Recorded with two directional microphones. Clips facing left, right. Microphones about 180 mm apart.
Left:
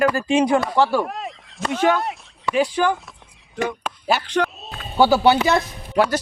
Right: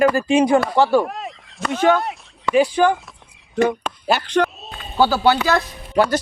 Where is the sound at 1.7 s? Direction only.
Centre (ahead or behind).